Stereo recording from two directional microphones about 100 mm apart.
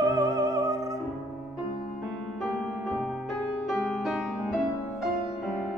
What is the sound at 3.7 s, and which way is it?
Music, centre (ahead or behind).